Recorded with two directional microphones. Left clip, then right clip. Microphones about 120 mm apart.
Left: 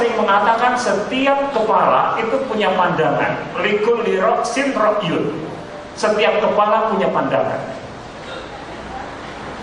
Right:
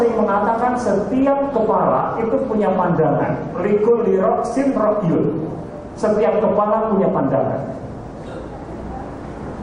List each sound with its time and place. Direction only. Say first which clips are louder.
0.0 s a man's voice: left 2 dB; 30° left (ahead or behind)